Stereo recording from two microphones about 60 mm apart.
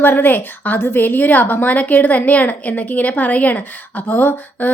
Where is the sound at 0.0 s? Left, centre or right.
Left.